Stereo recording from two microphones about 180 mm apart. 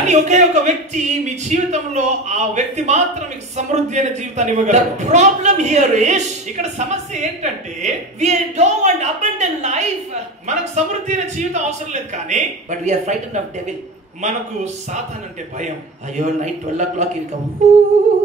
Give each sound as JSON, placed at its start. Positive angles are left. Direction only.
{"t": 0.0, "sound": "speech", "side_deg": -40}
{"t": 16.2, "sound": "speech", "side_deg": -40}